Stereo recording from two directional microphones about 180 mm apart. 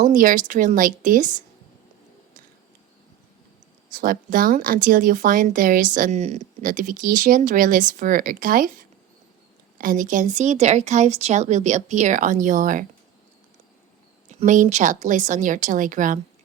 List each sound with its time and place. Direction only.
0.0 s speech: 45° right (ahead or behind)
3.9 s speech: 50° right (ahead or behind)
14.3 s speech: 40° right (ahead or behind)